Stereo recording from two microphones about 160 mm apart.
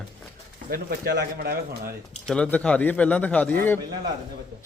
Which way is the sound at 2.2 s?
5° left (ahead or behind).